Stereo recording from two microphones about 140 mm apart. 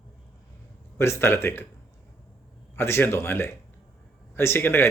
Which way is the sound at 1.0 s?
15° left (ahead or behind).